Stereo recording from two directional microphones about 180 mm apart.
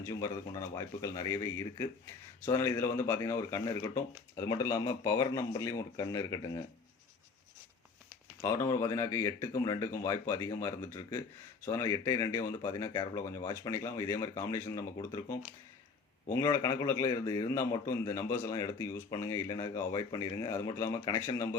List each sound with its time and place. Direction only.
0.0 s a man's voice: 20° left (ahead or behind)
8.4 s a man's voice: 15° left (ahead or behind)